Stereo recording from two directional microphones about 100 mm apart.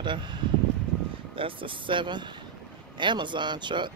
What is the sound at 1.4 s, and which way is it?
Speech, 60° right (ahead or behind).